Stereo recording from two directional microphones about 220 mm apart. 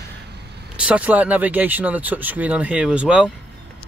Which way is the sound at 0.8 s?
5° right (ahead or behind).